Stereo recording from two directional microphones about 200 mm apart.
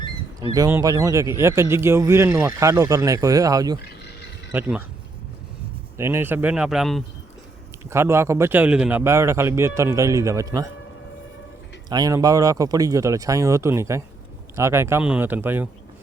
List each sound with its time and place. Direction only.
0.3 s a man's voice: 20° right (ahead or behind)
6.0 s a man's voice: 10° right (ahead or behind)
7.9 s a man's voice: 15° right (ahead or behind)
11.9 s a man's voice: 20° right (ahead or behind)